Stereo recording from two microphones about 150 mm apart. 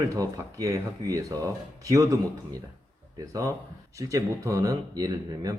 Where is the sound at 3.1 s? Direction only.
20° right (ahead or behind).